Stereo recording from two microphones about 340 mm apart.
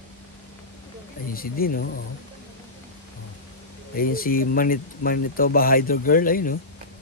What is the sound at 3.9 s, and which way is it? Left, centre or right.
Speech, left.